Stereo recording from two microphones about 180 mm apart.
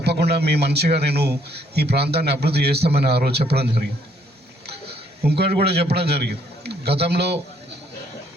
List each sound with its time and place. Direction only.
0.0 s a man's voice: 65° right (ahead or behind)
4.6 s a man's voice: 65° right (ahead or behind)